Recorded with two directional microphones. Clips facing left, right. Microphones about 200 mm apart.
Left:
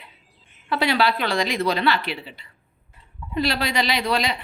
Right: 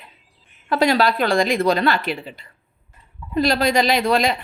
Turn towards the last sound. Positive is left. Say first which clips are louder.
# right 5 dB
turn(degrees=-45)  # may be behind; listen again after turning